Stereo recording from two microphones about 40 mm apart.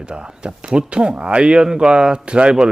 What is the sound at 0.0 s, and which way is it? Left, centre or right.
Speech, right.